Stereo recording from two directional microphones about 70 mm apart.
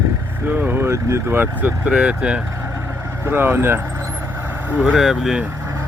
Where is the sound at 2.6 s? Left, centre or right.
Right.